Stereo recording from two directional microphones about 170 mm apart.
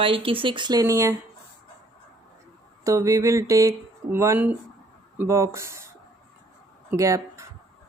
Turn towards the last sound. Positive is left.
turn(degrees=-20)  # may be behind; listen again after turning